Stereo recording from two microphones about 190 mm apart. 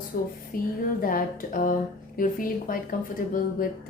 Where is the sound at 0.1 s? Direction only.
50° left (ahead or behind).